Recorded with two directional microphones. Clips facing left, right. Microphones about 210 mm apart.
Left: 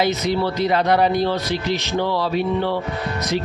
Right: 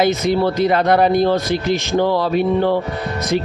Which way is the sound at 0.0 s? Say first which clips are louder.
Right 4 dB; 50° right (ahead or behind).